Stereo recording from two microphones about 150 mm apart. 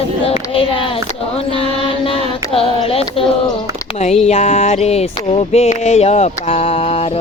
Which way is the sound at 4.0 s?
45° left (ahead or behind).